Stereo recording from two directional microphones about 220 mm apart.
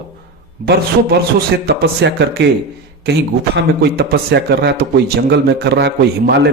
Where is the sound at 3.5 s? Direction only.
45° right (ahead or behind).